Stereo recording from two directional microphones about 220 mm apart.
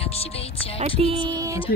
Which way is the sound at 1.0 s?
25° right (ahead or behind).